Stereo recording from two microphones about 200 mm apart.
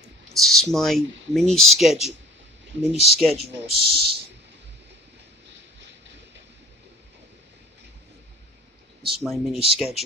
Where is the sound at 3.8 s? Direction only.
50° right (ahead or behind).